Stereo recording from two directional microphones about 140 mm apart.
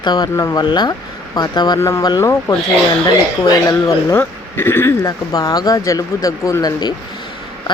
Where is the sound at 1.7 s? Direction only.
20° left (ahead or behind).